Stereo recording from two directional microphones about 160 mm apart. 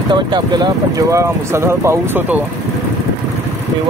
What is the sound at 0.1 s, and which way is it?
Speech, 25° right (ahead or behind).